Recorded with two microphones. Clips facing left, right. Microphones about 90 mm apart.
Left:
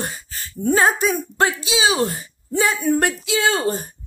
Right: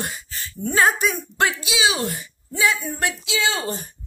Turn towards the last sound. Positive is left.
turn(degrees=45)  # may be behind; listen again after turning